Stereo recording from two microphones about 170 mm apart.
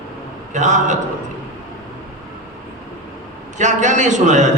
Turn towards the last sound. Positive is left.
turn(degrees=-45)  # may be behind; listen again after turning